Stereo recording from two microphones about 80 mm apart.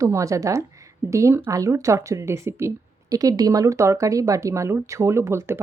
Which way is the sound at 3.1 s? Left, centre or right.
Right.